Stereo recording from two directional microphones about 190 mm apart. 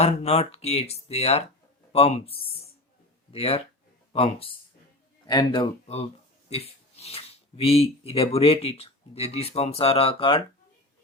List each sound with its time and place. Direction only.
0.0 s speech: 35° left (ahead or behind)